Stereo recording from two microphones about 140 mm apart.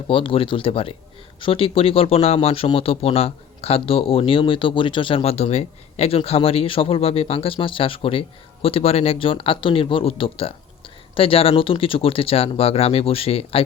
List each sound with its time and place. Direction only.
0.1 s speech: 40° left (ahead or behind)